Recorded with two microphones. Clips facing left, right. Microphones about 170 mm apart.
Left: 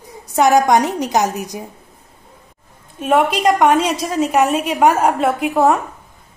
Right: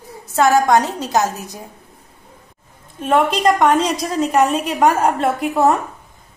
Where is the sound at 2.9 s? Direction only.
10° left (ahead or behind).